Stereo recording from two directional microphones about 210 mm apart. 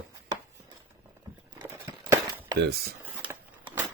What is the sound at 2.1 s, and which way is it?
Cutlery, 10° right (ahead or behind).